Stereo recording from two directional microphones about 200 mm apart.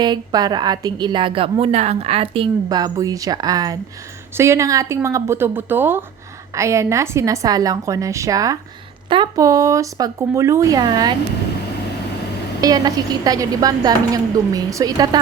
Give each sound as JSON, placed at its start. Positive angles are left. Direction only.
{"t": 0.0, "sound": "a woman's voice", "side_deg": -20}
{"t": 12.6, "sound": "a woman's voice", "side_deg": -20}